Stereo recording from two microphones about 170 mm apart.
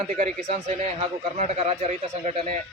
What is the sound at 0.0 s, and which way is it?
Speech, 45° right (ahead or behind).